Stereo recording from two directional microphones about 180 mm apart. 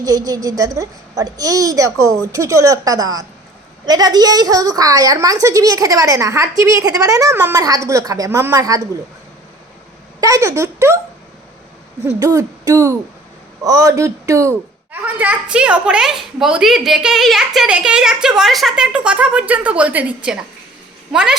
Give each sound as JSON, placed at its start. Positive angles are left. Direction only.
{"t": 0.0, "sound": "a woman's voice", "side_deg": -20}
{"t": 10.2, "sound": "a woman's voice", "side_deg": -20}
{"t": 12.2, "sound": "a woman's voice", "side_deg": -20}